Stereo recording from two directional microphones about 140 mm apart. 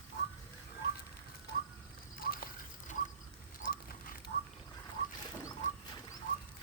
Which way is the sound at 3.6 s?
80° left.